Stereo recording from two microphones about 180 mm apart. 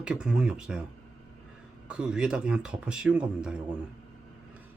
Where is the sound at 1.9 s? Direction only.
5° right (ahead or behind).